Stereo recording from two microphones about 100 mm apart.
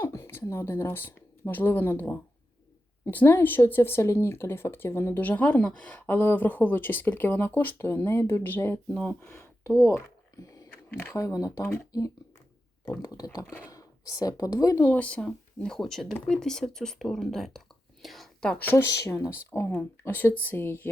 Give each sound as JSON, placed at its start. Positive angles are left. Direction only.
{"t": 0.0, "sound": "speech", "side_deg": 25}
{"t": 9.6, "sound": "a sound", "side_deg": 25}
{"t": 10.9, "sound": "speech", "side_deg": 20}
{"t": 11.2, "sound": "speech", "side_deg": 40}
{"t": 14.8, "sound": "speech", "side_deg": 15}
{"t": 18.0, "sound": "whispering", "side_deg": 0}
{"t": 18.6, "sound": "speech", "side_deg": 20}
{"t": 18.9, "sound": "speech", "side_deg": 30}